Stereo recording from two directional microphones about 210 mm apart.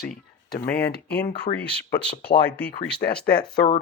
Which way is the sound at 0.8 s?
50° left (ahead or behind).